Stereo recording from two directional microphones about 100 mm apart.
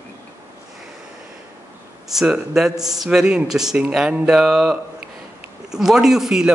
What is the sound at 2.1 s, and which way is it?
A man's voice, 5° right (ahead or behind).